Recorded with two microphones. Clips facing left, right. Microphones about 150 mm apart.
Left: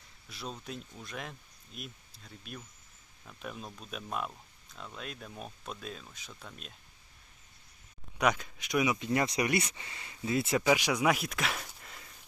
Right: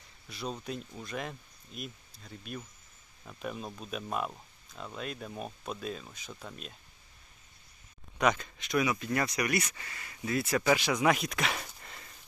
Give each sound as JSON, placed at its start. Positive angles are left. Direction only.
{"t": 0.3, "sound": "speech", "side_deg": 0}
{"t": 8.2, "sound": "speech", "side_deg": 5}
{"t": 10.7, "sound": "speech", "side_deg": 10}